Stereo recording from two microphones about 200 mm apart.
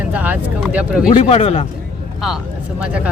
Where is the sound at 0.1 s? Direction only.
10° right (ahead or behind).